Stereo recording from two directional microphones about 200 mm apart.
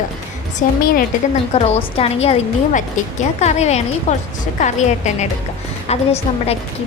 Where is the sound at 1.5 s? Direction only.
30° left (ahead or behind).